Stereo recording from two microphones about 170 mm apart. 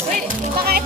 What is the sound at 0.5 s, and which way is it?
Speech, 65° right (ahead or behind).